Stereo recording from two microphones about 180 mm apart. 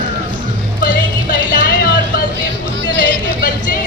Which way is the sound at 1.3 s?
55° left (ahead or behind).